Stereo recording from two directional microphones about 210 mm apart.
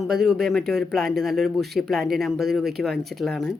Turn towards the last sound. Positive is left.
turn(degrees=0)  # may be behind; listen again after turning